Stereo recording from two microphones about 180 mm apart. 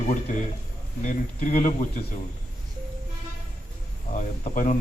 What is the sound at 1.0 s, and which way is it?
Speech, 45° left (ahead or behind).